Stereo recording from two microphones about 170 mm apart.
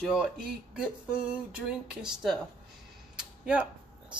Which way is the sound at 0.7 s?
5° right (ahead or behind).